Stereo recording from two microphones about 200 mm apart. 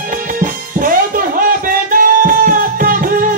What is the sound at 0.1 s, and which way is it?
Music, 45° right (ahead or behind).